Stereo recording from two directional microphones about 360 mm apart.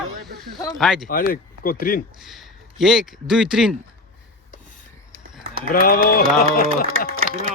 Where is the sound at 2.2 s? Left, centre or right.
Centre.